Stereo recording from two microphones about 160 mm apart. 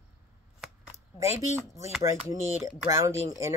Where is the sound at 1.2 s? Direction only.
15° right (ahead or behind).